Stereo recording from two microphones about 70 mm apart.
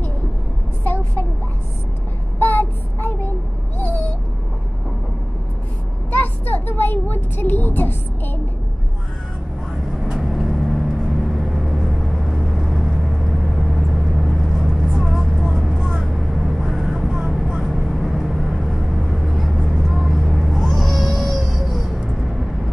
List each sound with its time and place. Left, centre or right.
2.3 s speech: left
6.1 s speech: left
9.9 s vehicle: centre